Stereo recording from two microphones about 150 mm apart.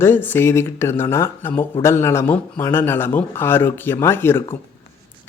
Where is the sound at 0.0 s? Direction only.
15° left (ahead or behind).